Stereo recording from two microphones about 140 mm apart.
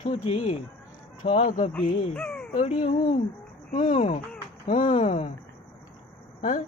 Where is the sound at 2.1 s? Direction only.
5° left (ahead or behind).